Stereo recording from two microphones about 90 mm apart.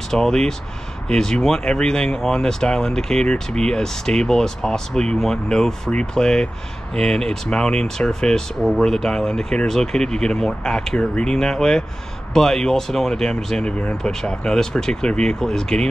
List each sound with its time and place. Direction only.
0.1 s speech: 5° left (ahead or behind)